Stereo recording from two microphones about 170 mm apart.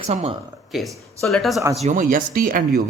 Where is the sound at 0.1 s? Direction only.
40° right (ahead or behind).